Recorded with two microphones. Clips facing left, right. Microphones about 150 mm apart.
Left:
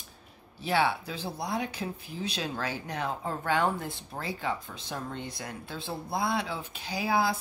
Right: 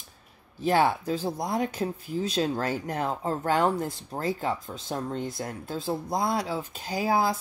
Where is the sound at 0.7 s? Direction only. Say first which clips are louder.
Right 5 dB; 45° right (ahead or behind).